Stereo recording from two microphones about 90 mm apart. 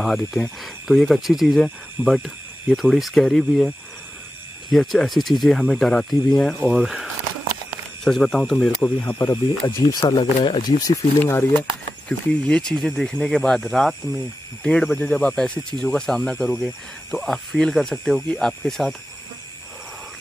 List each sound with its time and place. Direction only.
0.0 s speech: centre (ahead or behind)
9.0 s speech: 30° left (ahead or behind)
9.8 s speech: 45° left (ahead or behind)
12.1 s speech: 10° left (ahead or behind)